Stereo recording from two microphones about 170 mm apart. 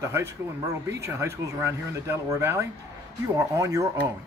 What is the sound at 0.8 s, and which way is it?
A man's voice, 15° right (ahead or behind).